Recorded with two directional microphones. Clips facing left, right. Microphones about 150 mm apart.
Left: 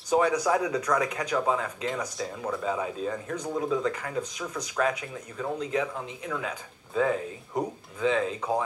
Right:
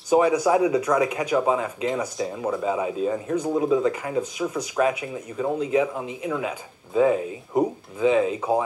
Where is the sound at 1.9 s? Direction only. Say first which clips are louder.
Right 6 dB; centre (ahead or behind).